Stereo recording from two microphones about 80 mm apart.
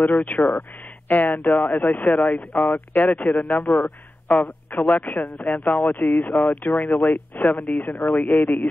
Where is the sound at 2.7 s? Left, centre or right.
Left.